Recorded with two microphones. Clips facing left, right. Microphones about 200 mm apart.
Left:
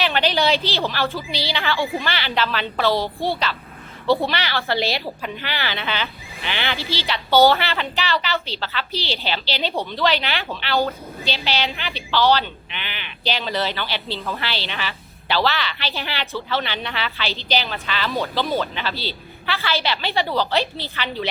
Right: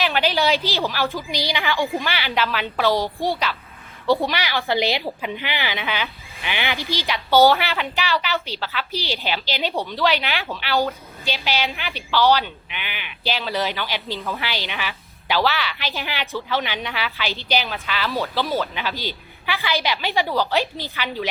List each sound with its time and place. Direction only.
0.1 s a woman's voice: 5° right (ahead or behind)